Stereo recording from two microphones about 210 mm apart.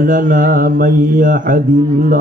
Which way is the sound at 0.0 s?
40° right (ahead or behind).